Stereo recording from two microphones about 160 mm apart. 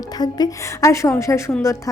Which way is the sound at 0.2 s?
25° left (ahead or behind).